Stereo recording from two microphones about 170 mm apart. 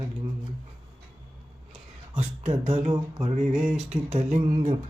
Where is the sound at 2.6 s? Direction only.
35° right (ahead or behind).